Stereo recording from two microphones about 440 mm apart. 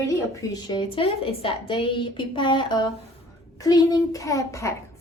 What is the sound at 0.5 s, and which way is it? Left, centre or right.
A woman's voice, centre.